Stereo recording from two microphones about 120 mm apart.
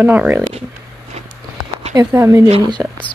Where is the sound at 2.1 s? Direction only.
25° right (ahead or behind).